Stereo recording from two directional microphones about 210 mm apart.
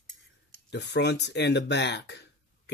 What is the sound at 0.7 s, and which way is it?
Speech, 55° left (ahead or behind).